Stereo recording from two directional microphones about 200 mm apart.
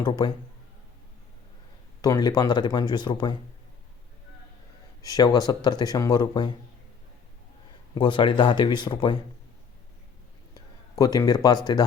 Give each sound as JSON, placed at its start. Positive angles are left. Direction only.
{"t": 0.0, "sound": "speech", "side_deg": 20}
{"t": 2.0, "sound": "speech", "side_deg": 20}
{"t": 5.0, "sound": "speech", "side_deg": 20}
{"t": 7.9, "sound": "speech", "side_deg": 25}
{"t": 10.9, "sound": "speech", "side_deg": 15}